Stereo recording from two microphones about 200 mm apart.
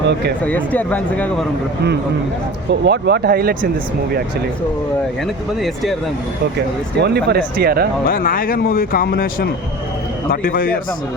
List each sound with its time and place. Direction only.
0.4 s speech: 5° left (ahead or behind)
2.8 s speech: 55° right (ahead or behind)
5.5 s speech: centre (ahead or behind)
7.0 s speech: 55° right (ahead or behind)
8.0 s speech: 45° left (ahead or behind)